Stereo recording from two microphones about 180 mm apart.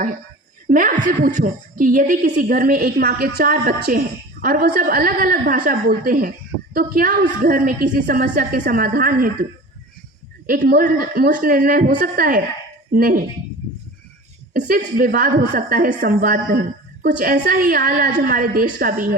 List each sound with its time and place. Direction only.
0.7 s a woman's voice: 50° right (ahead or behind)
10.4 s a woman's voice: 55° right (ahead or behind)
14.5 s a woman's voice: 45° right (ahead or behind)